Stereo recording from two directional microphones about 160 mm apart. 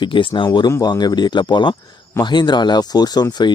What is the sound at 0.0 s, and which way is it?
Speech, 30° left (ahead or behind).